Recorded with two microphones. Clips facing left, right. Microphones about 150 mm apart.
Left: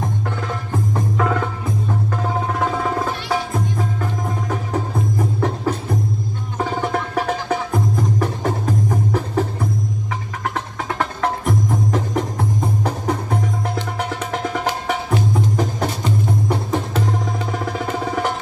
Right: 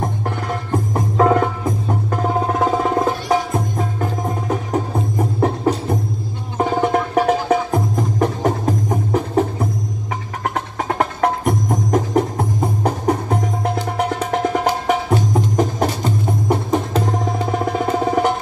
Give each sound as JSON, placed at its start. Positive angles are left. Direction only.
{"t": 0.9, "sound": "music", "side_deg": -40}